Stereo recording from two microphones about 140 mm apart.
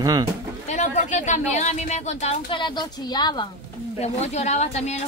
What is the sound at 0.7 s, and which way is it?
Speech, 60° left (ahead or behind).